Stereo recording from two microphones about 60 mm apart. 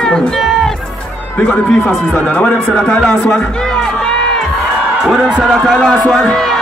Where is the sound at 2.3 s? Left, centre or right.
Left.